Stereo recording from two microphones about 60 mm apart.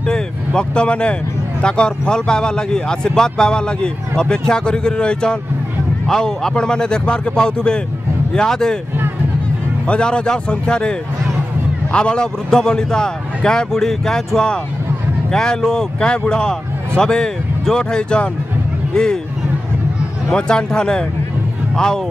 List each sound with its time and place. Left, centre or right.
0.0 s a man's voice: centre
9.8 s a man's voice: centre
20.3 s a man's voice: centre